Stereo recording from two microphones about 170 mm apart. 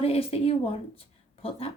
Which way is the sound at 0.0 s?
35° left (ahead or behind).